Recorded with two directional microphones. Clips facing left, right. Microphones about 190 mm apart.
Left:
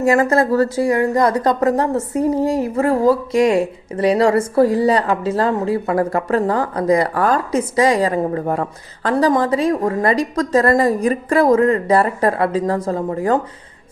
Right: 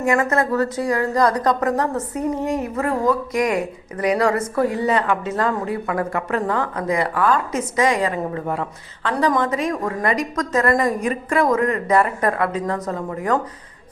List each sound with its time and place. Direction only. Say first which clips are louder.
0.0 s speech: left 4 dB; 30° left (ahead or behind)